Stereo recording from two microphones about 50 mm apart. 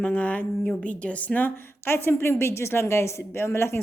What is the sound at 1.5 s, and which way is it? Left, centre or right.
A woman's voice, left.